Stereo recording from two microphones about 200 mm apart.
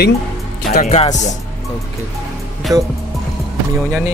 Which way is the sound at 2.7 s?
15° right (ahead or behind).